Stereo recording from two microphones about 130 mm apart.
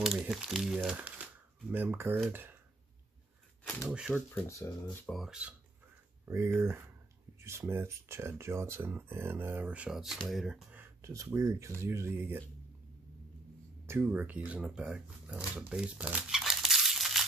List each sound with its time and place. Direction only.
0.0 s speech: 5° right (ahead or behind)
3.9 s speech: 5° right (ahead or behind)
4.3 s speech: 25° left (ahead or behind)
5.0 s speech: centre (ahead or behind)
6.2 s speech: 20° right (ahead or behind)
10.8 s a sound: 20° right (ahead or behind)
11.3 s speech: 20° right (ahead or behind)
13.8 s speech: 15° right (ahead or behind); by 17.2 s centre (ahead or behind)